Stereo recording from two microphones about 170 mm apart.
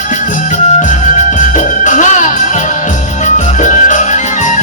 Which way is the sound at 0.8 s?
45° left (ahead or behind).